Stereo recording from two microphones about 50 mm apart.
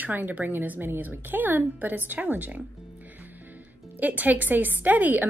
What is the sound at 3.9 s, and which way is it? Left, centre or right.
Speech, right.